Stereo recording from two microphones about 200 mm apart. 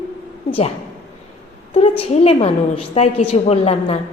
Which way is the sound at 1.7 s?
30° left (ahead or behind).